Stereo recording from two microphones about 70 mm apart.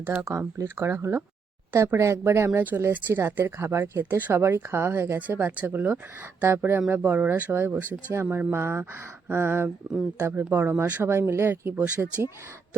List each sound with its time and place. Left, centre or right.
0.1 s speech: right
0.6 s speech: right